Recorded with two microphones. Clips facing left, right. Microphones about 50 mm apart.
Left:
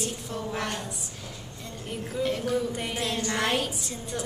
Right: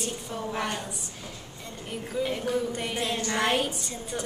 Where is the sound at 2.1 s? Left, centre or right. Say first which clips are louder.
Left 1 dB; centre.